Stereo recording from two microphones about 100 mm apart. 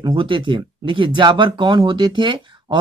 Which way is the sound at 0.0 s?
55° right (ahead or behind).